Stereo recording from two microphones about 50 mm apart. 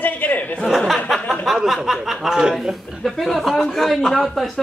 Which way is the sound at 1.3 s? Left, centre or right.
Centre.